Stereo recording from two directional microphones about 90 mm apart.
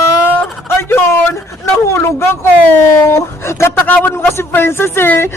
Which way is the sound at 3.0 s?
30° left (ahead or behind).